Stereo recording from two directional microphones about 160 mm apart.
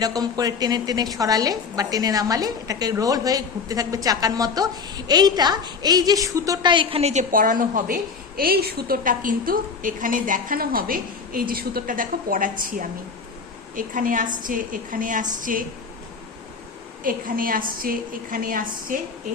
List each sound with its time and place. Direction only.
0.0 s a woman's voice: 25° right (ahead or behind); by 7.9 s 60° right (ahead or behind)
8.4 s a woman's voice: 70° right (ahead or behind)
17.0 s a woman's voice: 60° right (ahead or behind)